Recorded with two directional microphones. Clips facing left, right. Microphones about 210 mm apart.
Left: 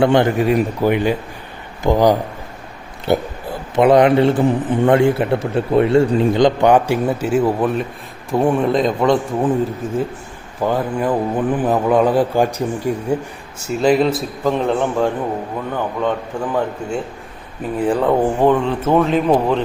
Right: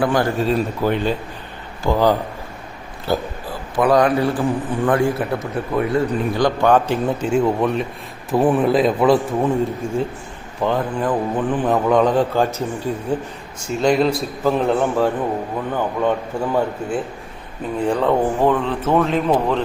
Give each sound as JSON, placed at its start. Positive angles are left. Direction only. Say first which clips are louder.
{"t": 0.0, "sound": "a man's voice", "louder": "left 4 dB", "side_deg": 25}
{"t": 17.7, "sound": "a man's voice", "louder": "left 2 dB", "side_deg": 5}